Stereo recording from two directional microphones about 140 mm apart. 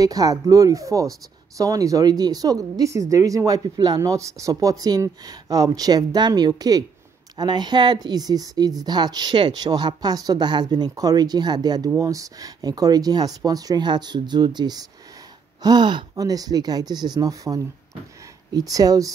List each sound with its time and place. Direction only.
0.0 s speech: 25° right (ahead or behind)